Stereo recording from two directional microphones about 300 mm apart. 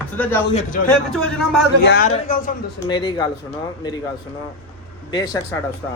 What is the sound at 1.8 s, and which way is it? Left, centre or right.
Speech, left.